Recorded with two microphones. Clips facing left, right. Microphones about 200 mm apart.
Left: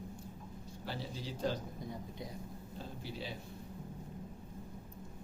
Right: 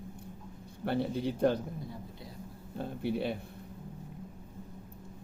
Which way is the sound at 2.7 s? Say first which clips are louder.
Right 13 dB; 60° right (ahead or behind).